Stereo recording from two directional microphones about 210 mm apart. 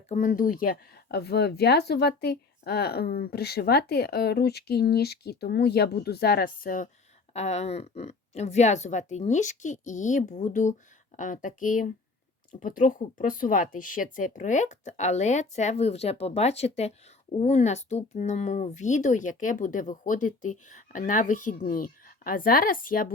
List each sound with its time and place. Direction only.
0.1 s speech: 35° left (ahead or behind)